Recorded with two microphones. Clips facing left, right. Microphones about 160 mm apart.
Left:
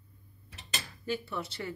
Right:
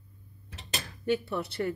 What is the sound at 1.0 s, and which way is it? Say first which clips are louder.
Speech: right 6 dB; 60° right (ahead or behind).